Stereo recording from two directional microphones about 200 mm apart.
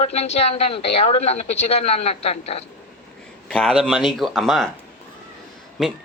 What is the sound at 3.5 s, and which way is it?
Speech, 5° right (ahead or behind).